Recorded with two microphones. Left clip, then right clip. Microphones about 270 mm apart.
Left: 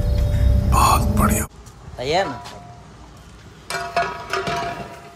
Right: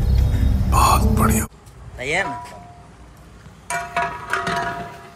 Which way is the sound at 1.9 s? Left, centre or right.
Centre.